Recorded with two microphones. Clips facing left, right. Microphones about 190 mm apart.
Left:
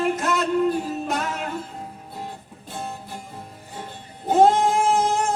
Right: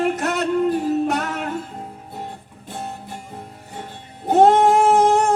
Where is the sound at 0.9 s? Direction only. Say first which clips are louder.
Right 6 dB; 65° right (ahead or behind).